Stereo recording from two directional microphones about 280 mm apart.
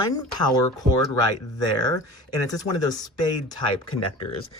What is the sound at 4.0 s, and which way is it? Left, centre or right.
Speech, left.